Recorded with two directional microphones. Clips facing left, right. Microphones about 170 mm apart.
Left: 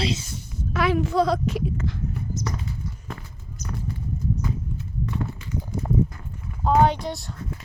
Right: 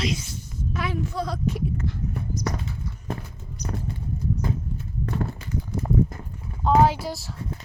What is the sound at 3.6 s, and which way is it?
Clip-clop, 45° left (ahead or behind).